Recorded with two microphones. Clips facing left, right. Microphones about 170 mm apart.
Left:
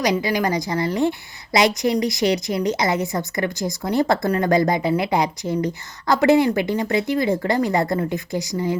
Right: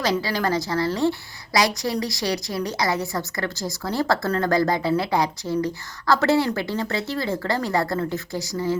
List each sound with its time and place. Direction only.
0.0 s a woman's voice: 15° left (ahead or behind)